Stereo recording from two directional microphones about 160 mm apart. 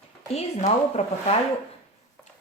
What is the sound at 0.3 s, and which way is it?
Speech, 40° left (ahead or behind).